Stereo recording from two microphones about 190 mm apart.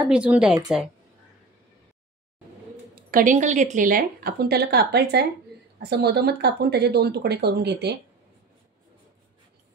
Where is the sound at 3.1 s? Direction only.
45° right (ahead or behind); by 7.9 s 60° right (ahead or behind).